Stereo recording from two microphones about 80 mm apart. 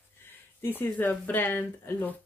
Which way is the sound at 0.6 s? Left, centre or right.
Left.